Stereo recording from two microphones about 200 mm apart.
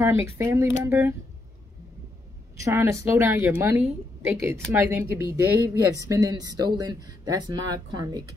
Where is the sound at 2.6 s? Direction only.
15° right (ahead or behind).